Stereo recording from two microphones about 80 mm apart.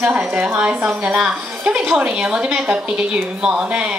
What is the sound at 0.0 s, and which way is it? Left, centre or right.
A woman's voice, right.